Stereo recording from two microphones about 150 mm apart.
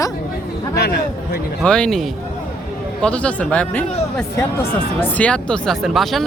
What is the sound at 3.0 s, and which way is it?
Speech, 10° left (ahead or behind).